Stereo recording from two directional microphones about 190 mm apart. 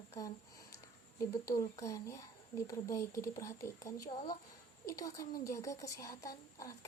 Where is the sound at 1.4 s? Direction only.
15° left (ahead or behind).